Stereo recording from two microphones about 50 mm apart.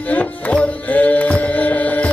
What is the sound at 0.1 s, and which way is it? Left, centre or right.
Music, left.